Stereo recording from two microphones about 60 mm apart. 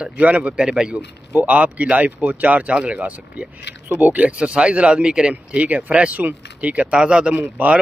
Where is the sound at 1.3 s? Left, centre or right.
Right.